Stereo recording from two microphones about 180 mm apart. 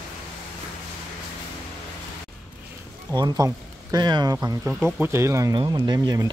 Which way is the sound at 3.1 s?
20° right (ahead or behind).